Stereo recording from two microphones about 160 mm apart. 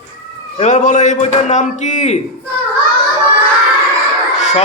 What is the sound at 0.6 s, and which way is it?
A man's voice, 50° left (ahead or behind).